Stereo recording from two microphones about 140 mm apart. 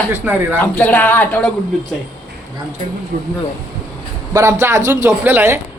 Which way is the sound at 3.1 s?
80° right.